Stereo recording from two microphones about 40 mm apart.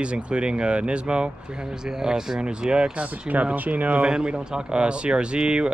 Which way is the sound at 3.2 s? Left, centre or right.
Right.